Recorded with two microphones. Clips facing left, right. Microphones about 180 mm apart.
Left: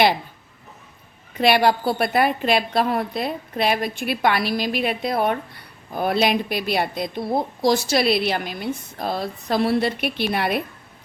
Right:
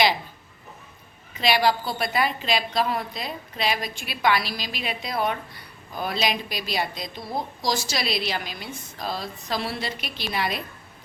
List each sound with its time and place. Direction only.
1.4 s a woman's voice: 55° left (ahead or behind)